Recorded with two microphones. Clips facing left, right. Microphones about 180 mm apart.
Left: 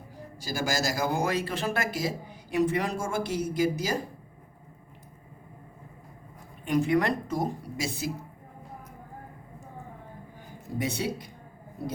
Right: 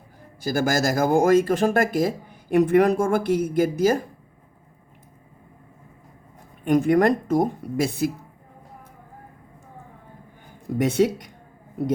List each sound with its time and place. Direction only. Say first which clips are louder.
0.4 s speech: right 7 dB; 55° right (ahead or behind)
6.7 s speech: right 7 dB; 50° right (ahead or behind)
10.8 s speech: right 10 dB; 65° right (ahead or behind)